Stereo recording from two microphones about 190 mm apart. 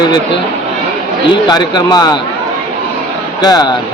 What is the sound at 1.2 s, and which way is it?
Speech, 20° left (ahead or behind).